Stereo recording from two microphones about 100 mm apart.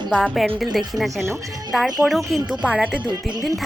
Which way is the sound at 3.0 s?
40° right (ahead or behind).